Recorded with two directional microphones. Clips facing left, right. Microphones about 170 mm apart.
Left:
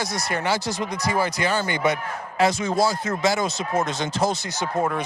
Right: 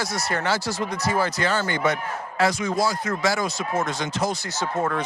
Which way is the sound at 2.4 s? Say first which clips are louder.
Left 2 dB; 25° left (ahead or behind).